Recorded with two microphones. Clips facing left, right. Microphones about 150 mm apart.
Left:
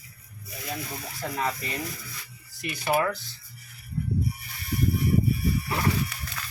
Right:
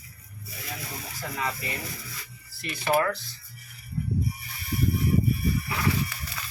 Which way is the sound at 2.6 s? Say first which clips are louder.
Right 1 dB; 10° left (ahead or behind).